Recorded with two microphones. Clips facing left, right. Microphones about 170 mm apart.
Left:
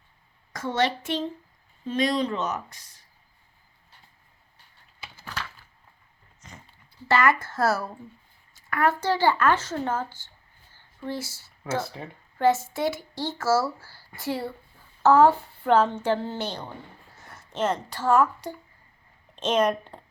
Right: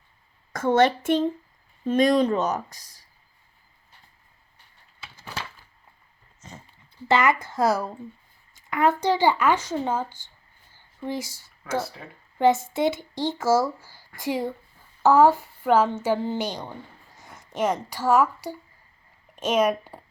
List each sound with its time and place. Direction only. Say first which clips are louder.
0.5 s a child's voice: right 6 dB; 50° right (ahead or behind)
7.1 s speech: right 1 dB; 20° right (ahead or behind)